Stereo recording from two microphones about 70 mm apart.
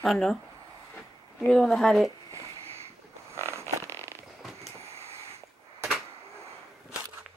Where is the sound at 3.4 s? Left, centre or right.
Right.